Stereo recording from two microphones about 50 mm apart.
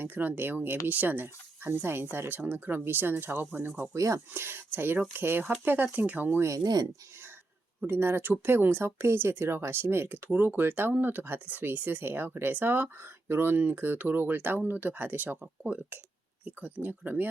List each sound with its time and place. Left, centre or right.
0.0 s speech: right
3.9 s speech: right
4.4 s speech: right
7.9 s speech: right
10.4 s speech: right
16.4 s speech: right